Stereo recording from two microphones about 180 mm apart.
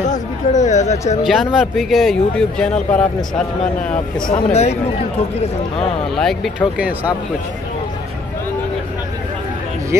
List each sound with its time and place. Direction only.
0.1 s a sound: 40° left (ahead or behind)
1.2 s speech: centre (ahead or behind)
4.3 s speech: 35° left (ahead or behind)
6.1 s speech: centre (ahead or behind)